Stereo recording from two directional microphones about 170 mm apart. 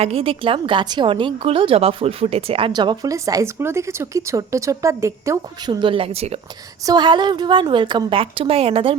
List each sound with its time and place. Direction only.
0.0 s a woman's voice: 35° right (ahead or behind); by 5.7 s 15° right (ahead or behind)
5.8 s speech: 30° right (ahead or behind)
6.8 s a woman's voice: 25° right (ahead or behind)